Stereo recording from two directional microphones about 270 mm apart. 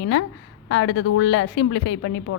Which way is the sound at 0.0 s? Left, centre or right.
Left.